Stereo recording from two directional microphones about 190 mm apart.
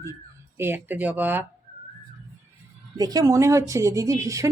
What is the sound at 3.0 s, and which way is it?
Speech, 20° right (ahead or behind).